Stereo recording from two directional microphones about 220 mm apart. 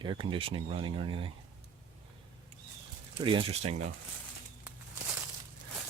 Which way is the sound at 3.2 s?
25° right (ahead or behind).